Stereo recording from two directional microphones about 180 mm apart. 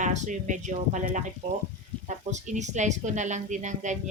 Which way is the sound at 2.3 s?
40° right (ahead or behind).